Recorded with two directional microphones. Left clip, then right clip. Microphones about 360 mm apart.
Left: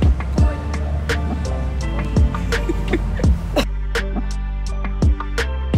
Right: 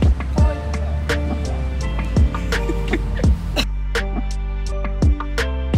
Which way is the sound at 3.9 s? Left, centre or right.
Centre.